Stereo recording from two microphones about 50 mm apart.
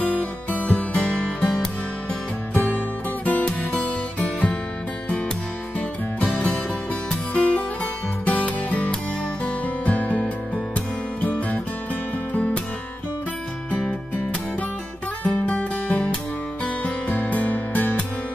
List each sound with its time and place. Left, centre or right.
0.0 s music: left
2.5 s music: left
6.3 s music: left
13.7 s music: left
15.2 s music: left